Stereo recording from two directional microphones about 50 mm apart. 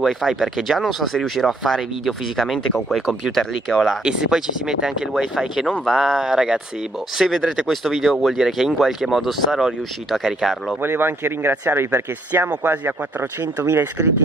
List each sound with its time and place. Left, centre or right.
0.0 s speech: centre
4.3 s speech: centre
5.7 s speech: centre
10.8 s speech: right